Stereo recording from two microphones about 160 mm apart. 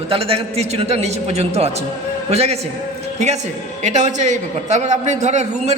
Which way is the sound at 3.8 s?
45° right (ahead or behind).